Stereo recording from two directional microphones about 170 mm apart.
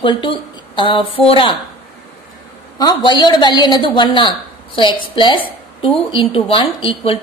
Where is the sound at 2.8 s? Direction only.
25° left (ahead or behind).